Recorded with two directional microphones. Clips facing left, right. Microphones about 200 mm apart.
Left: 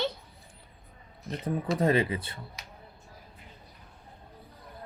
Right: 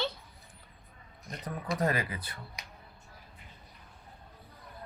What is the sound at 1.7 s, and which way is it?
Speech, 25° left (ahead or behind).